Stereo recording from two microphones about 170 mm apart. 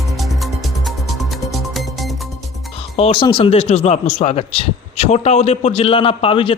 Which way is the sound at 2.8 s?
35° left (ahead or behind).